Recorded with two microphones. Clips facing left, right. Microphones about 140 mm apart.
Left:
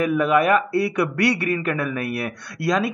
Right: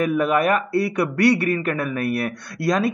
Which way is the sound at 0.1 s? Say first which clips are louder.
Left 1 dB; 45° right (ahead or behind).